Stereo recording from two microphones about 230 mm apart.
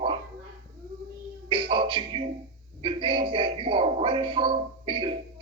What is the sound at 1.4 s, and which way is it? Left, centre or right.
A man's voice, right.